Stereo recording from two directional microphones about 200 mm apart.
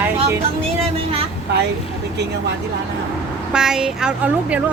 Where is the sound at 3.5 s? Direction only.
5° right (ahead or behind).